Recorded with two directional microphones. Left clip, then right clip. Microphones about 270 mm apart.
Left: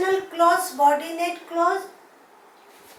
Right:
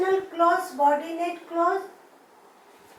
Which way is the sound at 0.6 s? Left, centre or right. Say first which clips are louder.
Left 3 dB; centre.